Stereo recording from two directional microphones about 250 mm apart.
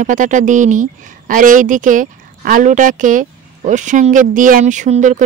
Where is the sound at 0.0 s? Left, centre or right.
Right.